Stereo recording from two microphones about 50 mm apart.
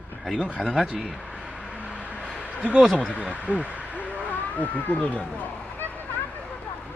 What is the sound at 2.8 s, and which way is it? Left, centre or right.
Speech, centre.